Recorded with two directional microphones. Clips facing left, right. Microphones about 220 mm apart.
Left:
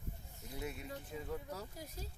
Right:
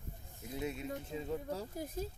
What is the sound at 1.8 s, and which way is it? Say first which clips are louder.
Speech: right 9 dB; 50° right (ahead or behind).